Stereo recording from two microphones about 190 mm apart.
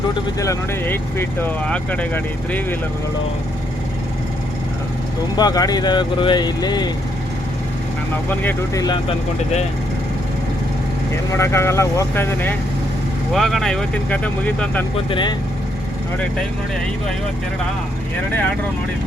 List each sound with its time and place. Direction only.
0.3 s speech: 15° left (ahead or behind)
5.4 s speech: 20° left (ahead or behind)
8.3 s speech: 10° left (ahead or behind)
11.3 s speech: 15° left (ahead or behind)
13.3 s speech: centre (ahead or behind)
15.1 s speech: 25° left (ahead or behind)